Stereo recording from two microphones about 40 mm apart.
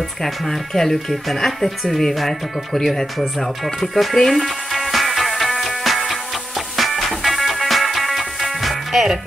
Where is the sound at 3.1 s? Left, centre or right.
Centre.